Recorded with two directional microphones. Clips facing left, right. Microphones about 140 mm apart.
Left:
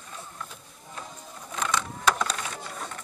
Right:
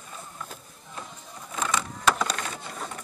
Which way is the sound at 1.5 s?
Centre (ahead or behind).